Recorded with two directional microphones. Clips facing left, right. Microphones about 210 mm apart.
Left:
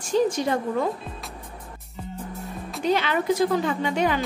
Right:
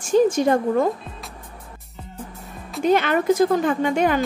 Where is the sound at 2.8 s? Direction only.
50° right (ahead or behind).